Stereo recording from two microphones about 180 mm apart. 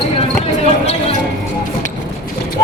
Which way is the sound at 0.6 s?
35° left (ahead or behind).